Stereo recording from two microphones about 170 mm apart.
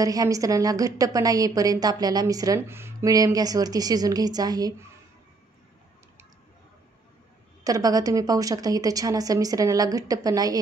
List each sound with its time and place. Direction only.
0.0 s a woman's voice: 20° right (ahead or behind)
7.6 s a woman's voice: 20° right (ahead or behind)